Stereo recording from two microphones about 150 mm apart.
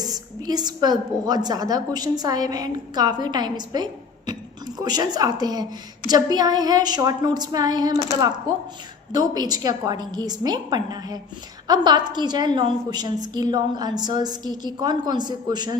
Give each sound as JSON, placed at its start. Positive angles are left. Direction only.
{"t": 0.0, "sound": "a woman's voice", "side_deg": -25}
{"t": 9.1, "sound": "a woman's voice", "side_deg": -25}